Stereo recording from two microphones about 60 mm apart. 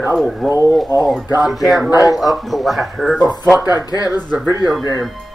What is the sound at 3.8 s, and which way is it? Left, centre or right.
Speech, left.